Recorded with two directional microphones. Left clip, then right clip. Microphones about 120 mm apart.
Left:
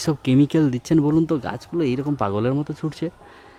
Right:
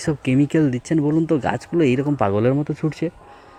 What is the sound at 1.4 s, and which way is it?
Speech, 20° right (ahead or behind).